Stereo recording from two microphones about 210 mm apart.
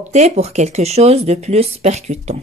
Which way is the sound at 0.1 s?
35° right (ahead or behind).